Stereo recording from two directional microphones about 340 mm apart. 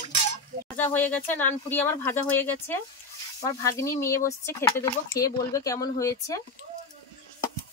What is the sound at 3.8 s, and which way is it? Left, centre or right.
Speech, centre.